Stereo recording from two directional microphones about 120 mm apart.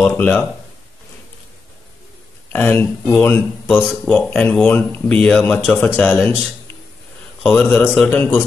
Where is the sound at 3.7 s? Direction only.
5° left (ahead or behind).